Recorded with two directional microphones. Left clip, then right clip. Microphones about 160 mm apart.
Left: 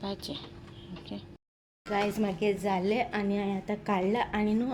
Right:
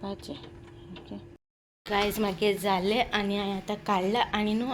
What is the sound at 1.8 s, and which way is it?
A woman's voice, 10° left (ahead or behind).